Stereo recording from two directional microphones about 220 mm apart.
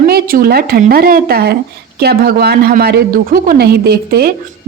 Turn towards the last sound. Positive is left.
turn(degrees=-45)  # may be behind; listen again after turning